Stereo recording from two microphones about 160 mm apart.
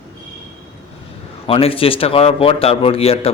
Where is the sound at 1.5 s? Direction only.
35° left (ahead or behind).